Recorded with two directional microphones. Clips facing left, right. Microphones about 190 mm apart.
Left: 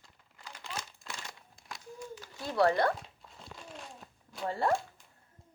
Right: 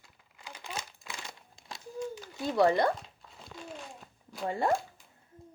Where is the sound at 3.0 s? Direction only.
Centre (ahead or behind).